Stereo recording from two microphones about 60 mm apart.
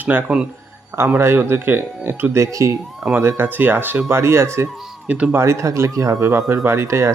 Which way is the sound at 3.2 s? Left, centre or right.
Right.